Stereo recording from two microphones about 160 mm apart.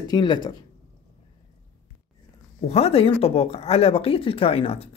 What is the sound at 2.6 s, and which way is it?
Speech, 40° left (ahead or behind).